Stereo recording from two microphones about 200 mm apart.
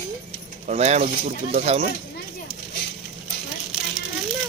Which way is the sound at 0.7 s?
35° right (ahead or behind).